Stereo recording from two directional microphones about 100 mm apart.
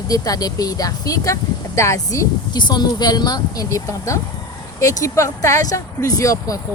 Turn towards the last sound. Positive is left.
turn(degrees=35)  # may be behind; listen again after turning